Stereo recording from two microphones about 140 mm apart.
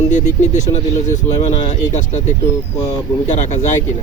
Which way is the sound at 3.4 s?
60° left (ahead or behind).